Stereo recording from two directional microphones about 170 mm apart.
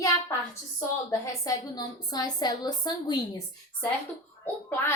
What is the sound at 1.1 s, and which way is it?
A woman's voice, 20° left (ahead or behind).